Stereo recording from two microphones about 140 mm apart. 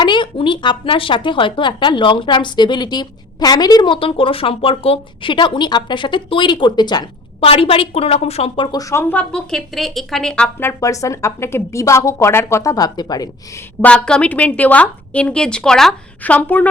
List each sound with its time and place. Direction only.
0.0 s a woman's voice: 35° left (ahead or behind)
7.3 s a woman's voice: 45° left (ahead or behind); by 10.5 s 5° left (ahead or behind)
10.6 s a woman's voice: 20° left (ahead or behind)
13.8 s a woman's voice: 5° left (ahead or behind)